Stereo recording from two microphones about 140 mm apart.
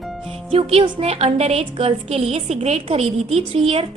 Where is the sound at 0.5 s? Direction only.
45° right (ahead or behind).